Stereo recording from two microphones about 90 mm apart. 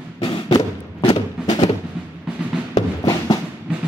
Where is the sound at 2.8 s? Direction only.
45° left (ahead or behind).